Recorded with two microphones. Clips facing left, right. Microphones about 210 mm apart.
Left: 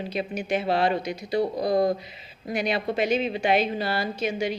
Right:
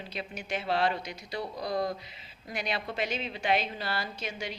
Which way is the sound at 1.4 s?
40° left (ahead or behind).